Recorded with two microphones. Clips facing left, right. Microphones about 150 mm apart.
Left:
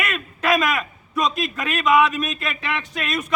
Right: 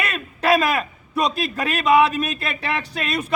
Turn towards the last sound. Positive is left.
turn(degrees=-30)  # may be behind; listen again after turning